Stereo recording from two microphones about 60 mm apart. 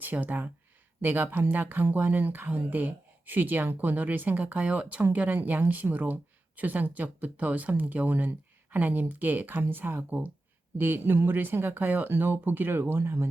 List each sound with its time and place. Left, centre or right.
0.0 s speech: right